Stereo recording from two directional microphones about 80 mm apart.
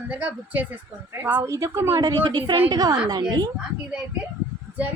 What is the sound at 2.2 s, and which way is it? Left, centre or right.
Speech, right.